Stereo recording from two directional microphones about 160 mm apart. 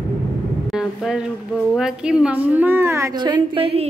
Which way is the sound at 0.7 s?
5° right (ahead or behind).